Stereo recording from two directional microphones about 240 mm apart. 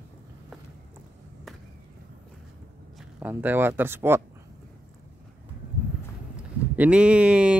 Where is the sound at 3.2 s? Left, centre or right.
Centre.